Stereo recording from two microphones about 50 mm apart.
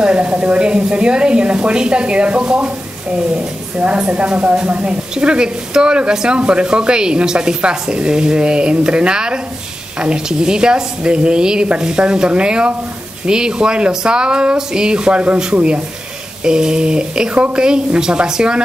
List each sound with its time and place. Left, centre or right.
0.0 s speech: right